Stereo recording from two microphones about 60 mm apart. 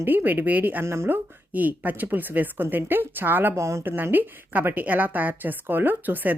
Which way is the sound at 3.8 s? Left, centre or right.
Right.